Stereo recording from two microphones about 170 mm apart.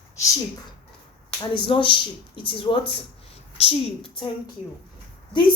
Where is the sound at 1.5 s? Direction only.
30° left (ahead or behind).